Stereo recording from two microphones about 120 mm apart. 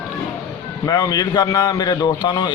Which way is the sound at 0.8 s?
30° left (ahead or behind).